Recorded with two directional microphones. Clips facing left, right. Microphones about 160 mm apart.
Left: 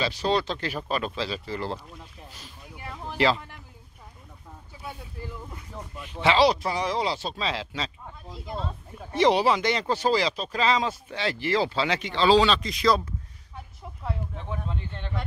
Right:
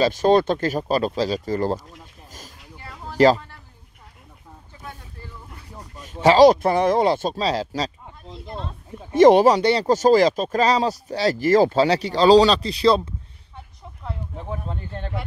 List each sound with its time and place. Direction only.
0.0 s speech: 50° right (ahead or behind)
2.8 s a sound: 15° left (ahead or behind)
5.8 s speech: 40° right (ahead or behind)
8.3 s speech: centre (ahead or behind)
9.1 s speech: 45° right (ahead or behind)
9.6 s speech: 35° right (ahead or behind)
14.3 s speech: 35° right (ahead or behind)